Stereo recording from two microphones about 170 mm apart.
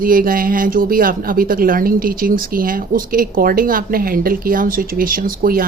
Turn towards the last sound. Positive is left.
turn(degrees=-55)  # may be behind; listen again after turning